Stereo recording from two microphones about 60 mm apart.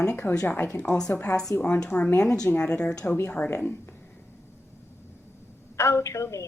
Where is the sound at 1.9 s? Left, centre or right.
Left.